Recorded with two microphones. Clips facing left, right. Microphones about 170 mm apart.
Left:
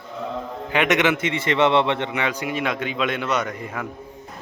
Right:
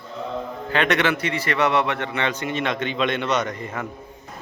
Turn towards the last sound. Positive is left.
turn(degrees=5)  # may be behind; listen again after turning